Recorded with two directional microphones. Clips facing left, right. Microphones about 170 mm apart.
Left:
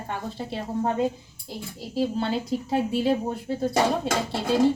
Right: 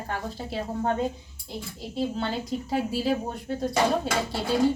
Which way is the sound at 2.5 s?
Centre (ahead or behind).